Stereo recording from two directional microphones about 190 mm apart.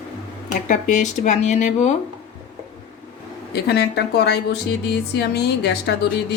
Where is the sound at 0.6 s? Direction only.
40° left (ahead or behind).